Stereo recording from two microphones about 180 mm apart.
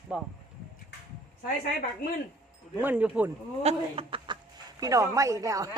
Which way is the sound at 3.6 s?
35° right (ahead or behind).